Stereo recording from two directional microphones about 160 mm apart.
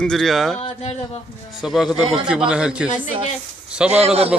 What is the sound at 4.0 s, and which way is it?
Speech, 40° right (ahead or behind).